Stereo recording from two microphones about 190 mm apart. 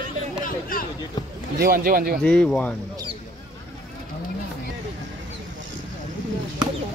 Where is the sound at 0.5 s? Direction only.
45° left (ahead or behind).